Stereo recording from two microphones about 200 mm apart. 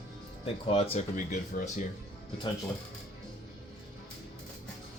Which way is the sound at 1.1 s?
40° left (ahead or behind).